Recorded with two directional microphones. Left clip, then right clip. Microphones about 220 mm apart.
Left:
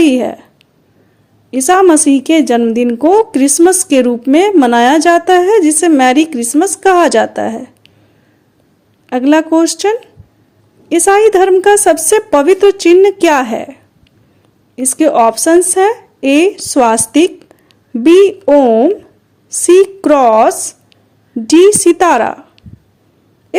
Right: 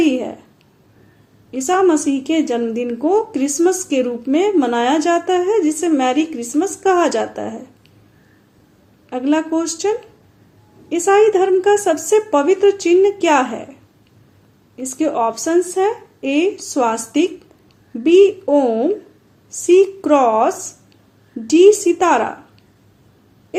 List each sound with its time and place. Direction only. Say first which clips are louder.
0.0 s a sound: left 7 dB; 45° left (ahead or behind)
1.5 s a woman's voice: left 7 dB; 45° left (ahead or behind)
9.0 s a woman's voice: left 8 dB; 45° left (ahead or behind)
14.8 s a woman's voice: left 9 dB; 45° left (ahead or behind)